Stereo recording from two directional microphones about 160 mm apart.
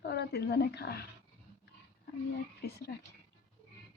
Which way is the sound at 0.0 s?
90° left.